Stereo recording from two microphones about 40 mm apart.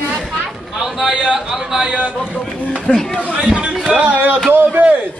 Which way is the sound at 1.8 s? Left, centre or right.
Right.